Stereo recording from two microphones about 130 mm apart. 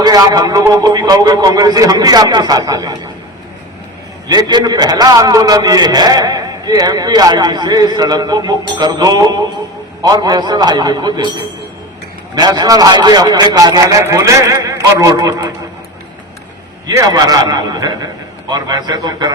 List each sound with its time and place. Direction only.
0.0 s a man's voice: 30° right (ahead or behind)
4.3 s a man's voice: 35° right (ahead or behind)
12.3 s a man's voice: 30° right (ahead or behind)
16.8 s a man's voice: 30° right (ahead or behind)